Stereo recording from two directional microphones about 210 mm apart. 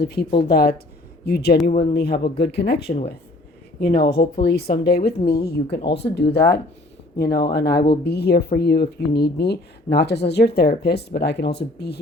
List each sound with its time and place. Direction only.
0.0 s speech: 50° left (ahead or behind)